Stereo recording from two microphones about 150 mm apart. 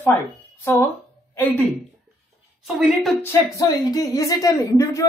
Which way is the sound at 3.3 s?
25° left (ahead or behind).